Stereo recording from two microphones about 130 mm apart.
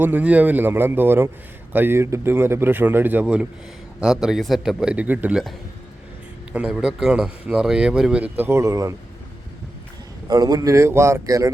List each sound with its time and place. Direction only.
0.0 s a man's voice: 10° right (ahead or behind)
10.2 s speech: 30° right (ahead or behind)